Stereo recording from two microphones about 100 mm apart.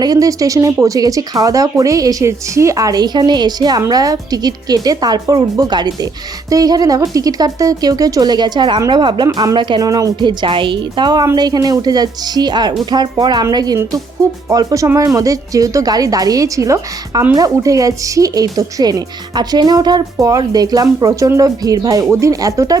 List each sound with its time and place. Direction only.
0.0 s speech: 40° right (ahead or behind)
9.8 s speech: 40° right (ahead or behind)